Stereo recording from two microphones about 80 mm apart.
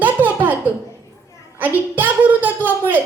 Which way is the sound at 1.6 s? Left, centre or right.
Right.